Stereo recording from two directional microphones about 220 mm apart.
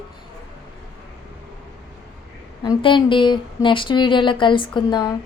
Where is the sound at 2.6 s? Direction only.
20° left (ahead or behind).